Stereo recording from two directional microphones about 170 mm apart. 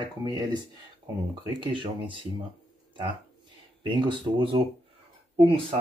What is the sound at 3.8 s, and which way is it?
Speech, 25° right (ahead or behind).